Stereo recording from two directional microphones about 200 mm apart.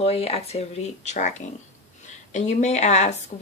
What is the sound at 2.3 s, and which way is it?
Speech, 35° left (ahead or behind).